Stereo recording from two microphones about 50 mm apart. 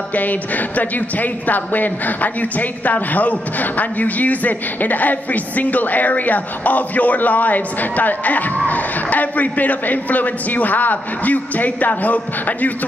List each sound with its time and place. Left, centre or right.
0.1 s speech: left